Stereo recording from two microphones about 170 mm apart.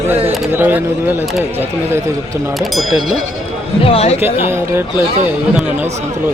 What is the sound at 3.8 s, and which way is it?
Speech, 35° left (ahead or behind).